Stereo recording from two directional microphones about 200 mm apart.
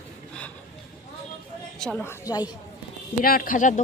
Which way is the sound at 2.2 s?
20° left (ahead or behind).